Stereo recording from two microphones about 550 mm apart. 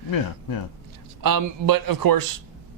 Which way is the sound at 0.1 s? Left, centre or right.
Left.